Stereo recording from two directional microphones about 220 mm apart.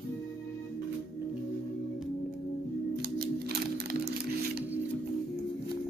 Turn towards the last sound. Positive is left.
turn(degrees=-45)  # may be behind; listen again after turning